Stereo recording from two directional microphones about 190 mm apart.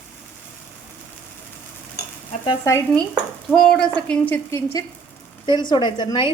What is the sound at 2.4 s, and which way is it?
Speech, 25° left (ahead or behind).